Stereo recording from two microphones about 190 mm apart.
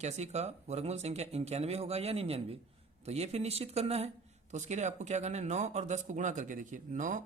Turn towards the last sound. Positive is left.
turn(degrees=-40)  # may be behind; listen again after turning